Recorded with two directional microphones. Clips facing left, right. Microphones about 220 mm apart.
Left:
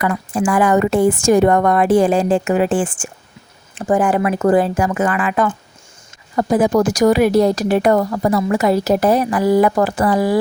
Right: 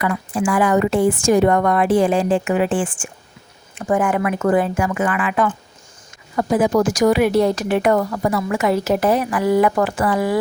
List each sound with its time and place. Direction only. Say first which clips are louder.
0.0 s a woman's voice: left 2 dB; 45° left (ahead or behind)